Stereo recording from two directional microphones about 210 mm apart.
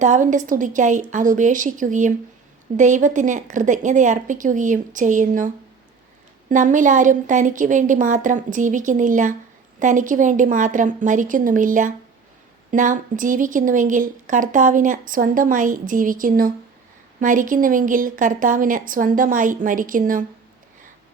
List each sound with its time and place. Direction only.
0.0 s a woman's voice: 35° right (ahead or behind)
6.5 s a woman's voice: 35° right (ahead or behind)